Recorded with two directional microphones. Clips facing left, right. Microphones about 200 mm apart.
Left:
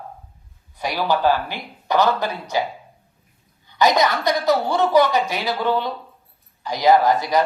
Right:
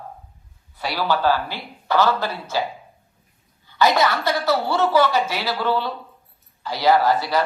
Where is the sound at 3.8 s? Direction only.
15° left (ahead or behind).